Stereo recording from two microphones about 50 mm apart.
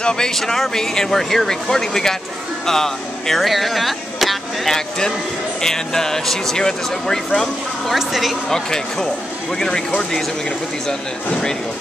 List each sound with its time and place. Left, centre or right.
0.0 s speech: centre
8.5 s speech: centre
11.2 s speech: centre